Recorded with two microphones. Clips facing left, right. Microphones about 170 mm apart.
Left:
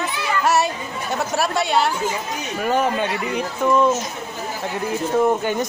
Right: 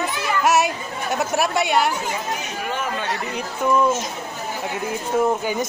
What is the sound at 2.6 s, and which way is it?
Speech, 40° left (ahead or behind).